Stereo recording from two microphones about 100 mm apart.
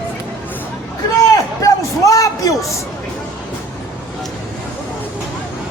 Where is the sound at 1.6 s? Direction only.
35° left (ahead or behind).